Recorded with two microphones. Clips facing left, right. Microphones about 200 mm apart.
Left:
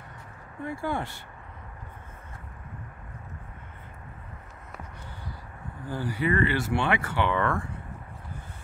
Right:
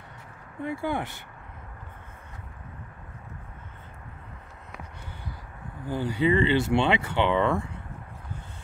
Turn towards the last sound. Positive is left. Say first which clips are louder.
# right 3 dB
turn(degrees=-20)  # may be behind; listen again after turning